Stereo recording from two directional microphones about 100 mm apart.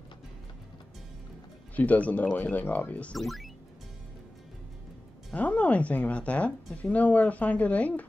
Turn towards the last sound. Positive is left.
turn(degrees=15)  # may be behind; listen again after turning